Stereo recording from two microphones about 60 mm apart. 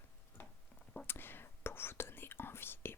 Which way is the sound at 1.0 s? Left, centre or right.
Left.